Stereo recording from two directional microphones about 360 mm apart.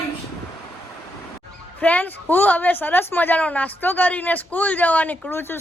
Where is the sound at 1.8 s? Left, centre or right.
Centre.